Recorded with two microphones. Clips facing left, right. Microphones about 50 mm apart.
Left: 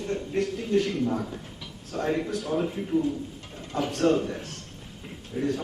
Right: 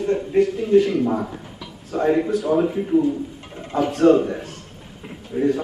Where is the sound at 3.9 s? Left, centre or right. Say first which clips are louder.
Right 9 dB; centre.